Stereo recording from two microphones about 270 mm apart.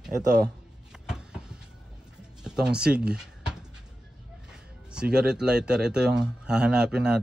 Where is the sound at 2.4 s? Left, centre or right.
Centre.